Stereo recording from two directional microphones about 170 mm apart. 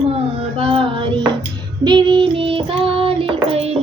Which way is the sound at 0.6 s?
30° right (ahead or behind).